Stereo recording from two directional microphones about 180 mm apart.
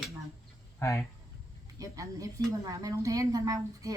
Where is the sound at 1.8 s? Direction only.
20° right (ahead or behind).